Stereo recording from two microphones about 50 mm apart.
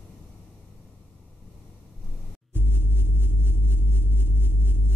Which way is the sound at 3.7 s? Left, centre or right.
Right.